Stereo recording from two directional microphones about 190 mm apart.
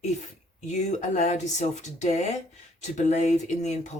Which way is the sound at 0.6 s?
40° left (ahead or behind).